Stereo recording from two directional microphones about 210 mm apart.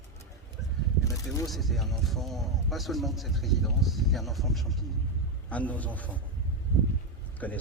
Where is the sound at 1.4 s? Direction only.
Centre (ahead or behind).